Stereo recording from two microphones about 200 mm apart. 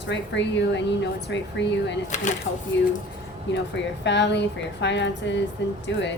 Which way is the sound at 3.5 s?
60° left (ahead or behind).